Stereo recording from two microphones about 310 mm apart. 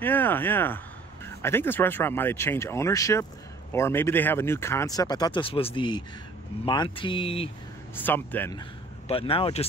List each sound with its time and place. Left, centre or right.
0.0 s speech: centre
7.9 s a man's voice: centre